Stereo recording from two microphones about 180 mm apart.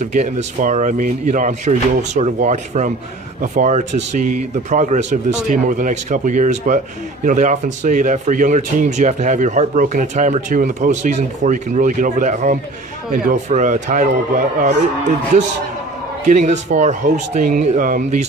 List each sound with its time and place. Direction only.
0.0 s speech: 40° right (ahead or behind)
16.3 s a man's voice: 40° right (ahead or behind)